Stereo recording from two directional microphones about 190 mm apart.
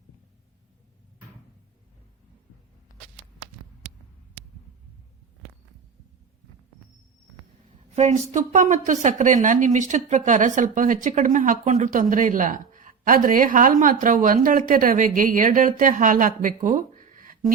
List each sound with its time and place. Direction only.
7.9 s a woman's voice: 35° right (ahead or behind)